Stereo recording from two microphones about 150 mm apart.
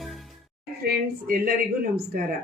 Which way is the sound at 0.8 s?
90° right.